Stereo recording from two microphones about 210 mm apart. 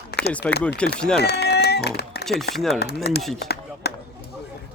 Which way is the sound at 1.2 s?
50° left (ahead or behind).